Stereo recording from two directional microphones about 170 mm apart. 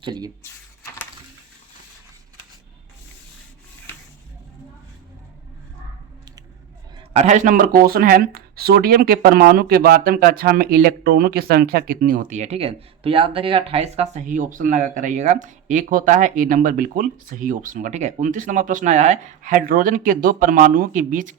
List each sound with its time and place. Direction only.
0.0 s speech: 25° right (ahead or behind)
7.1 s speech: 45° right (ahead or behind)